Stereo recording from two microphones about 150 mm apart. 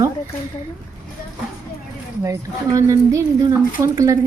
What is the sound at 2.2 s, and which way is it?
Speech, 20° right (ahead or behind).